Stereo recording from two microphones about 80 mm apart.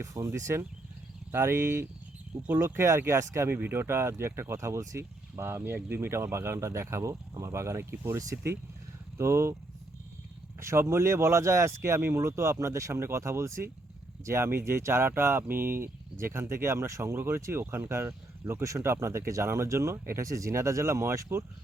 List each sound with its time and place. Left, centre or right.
0.0 s speech: right
8.2 s speech: right
10.6 s speech: right